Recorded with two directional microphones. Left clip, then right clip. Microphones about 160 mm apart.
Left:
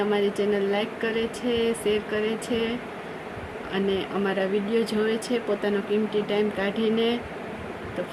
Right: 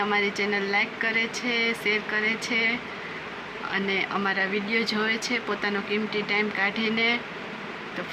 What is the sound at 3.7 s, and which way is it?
Speech, 15° left (ahead or behind).